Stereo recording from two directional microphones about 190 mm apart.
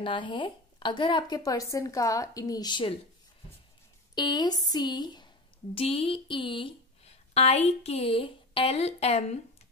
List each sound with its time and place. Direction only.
0.0 s speech: 25° left (ahead or behind)
4.1 s a woman's voice: 20° left (ahead or behind)